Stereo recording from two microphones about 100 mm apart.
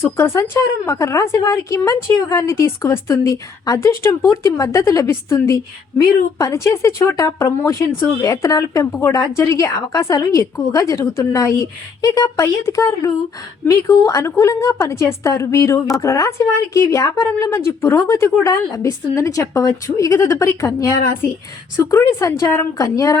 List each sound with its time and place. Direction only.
0.0 s a woman's voice: 30° left (ahead or behind)
7.2 s a woman's voice: 35° left (ahead or behind)